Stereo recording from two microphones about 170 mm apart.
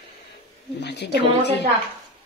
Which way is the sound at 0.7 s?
80° left.